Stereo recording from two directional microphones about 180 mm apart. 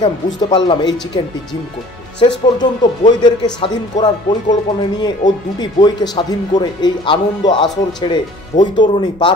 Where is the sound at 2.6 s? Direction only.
25° left (ahead or behind).